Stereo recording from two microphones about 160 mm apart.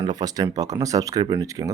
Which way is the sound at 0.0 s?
25° right (ahead or behind).